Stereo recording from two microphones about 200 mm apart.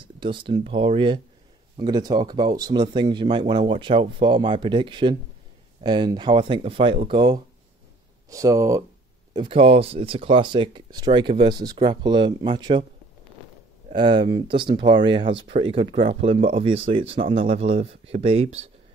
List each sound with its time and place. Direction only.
0.2 s speech: 25° right (ahead or behind)
13.9 s speech: 25° right (ahead or behind)